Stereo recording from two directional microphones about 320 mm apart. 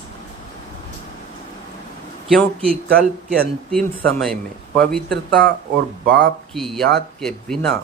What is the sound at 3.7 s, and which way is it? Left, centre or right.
Speech, centre.